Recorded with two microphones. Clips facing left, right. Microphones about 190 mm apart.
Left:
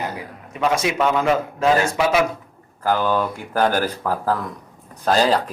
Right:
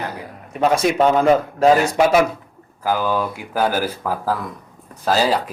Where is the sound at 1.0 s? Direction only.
35° right (ahead or behind).